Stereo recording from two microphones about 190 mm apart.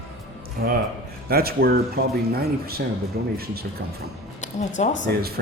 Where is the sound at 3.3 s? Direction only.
55° right (ahead or behind).